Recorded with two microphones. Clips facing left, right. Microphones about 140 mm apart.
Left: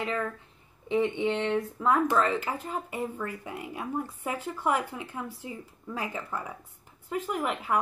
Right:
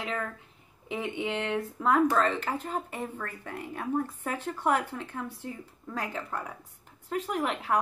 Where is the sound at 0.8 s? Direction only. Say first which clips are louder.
Left 6 dB; 10° right (ahead or behind).